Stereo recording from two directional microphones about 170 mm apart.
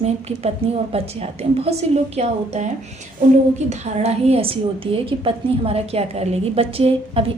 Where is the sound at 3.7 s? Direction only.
40° right (ahead or behind).